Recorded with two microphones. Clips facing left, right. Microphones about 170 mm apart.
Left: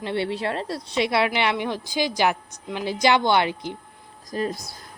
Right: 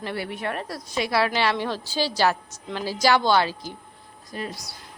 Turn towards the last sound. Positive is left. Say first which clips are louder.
# left 6 dB
turn(degrees=35)  # may be behind; listen again after turning